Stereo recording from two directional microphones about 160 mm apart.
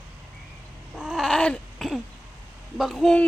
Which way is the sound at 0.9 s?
Centre (ahead or behind).